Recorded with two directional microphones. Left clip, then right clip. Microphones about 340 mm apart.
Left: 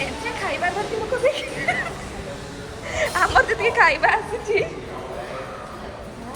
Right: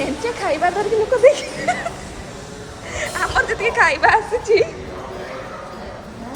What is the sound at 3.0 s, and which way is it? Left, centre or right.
A woman's voice, centre.